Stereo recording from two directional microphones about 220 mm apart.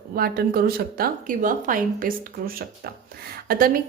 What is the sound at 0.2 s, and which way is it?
A woman's voice, 45° right (ahead or behind).